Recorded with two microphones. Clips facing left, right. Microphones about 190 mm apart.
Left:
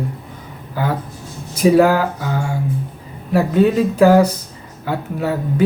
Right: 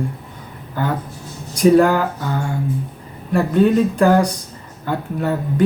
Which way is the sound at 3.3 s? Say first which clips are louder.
Even; 5° left (ahead or behind).